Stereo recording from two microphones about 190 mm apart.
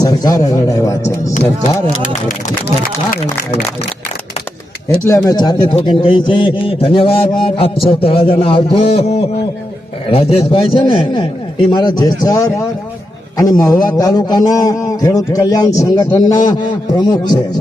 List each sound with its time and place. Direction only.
0.0 s a sound: 20° left (ahead or behind)
1.3 s speech: 40° left (ahead or behind)
5.0 s a man's voice: 15° left (ahead or behind)